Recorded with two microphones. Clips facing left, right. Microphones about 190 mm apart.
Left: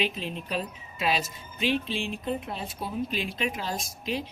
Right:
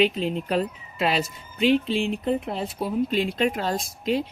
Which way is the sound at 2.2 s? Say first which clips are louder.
Right 6 dB; 75° right (ahead or behind).